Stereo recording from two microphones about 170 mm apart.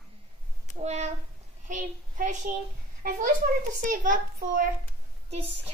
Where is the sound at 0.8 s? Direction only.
40° right (ahead or behind).